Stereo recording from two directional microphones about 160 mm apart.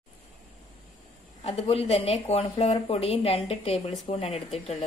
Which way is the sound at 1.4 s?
35° left (ahead or behind).